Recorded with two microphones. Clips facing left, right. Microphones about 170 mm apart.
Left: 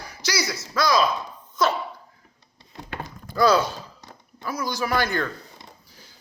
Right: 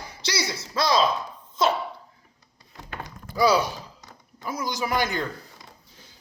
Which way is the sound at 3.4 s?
10° right (ahead or behind).